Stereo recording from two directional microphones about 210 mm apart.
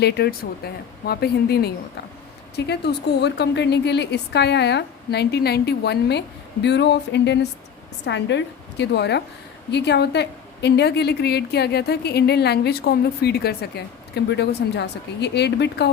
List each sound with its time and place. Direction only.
0.0 s a woman's voice: 50° left (ahead or behind)